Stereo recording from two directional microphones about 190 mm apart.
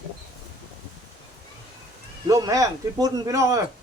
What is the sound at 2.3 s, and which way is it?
A man's voice, 15° right (ahead or behind).